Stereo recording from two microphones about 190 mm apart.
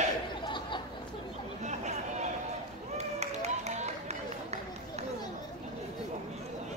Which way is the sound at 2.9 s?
35° right (ahead or behind).